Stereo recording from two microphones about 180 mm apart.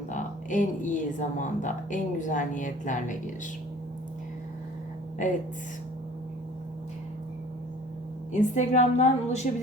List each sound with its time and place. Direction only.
0.1 s speech: 45° left (ahead or behind)
8.3 s a woman's voice: 40° left (ahead or behind)